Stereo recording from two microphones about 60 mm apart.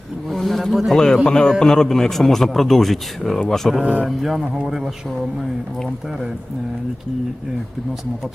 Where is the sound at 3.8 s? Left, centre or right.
Right.